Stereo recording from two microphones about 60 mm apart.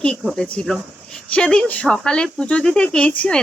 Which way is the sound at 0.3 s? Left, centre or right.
Centre.